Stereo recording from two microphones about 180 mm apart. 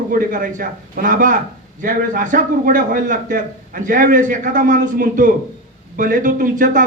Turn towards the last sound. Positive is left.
turn(degrees=-50)  # may be behind; listen again after turning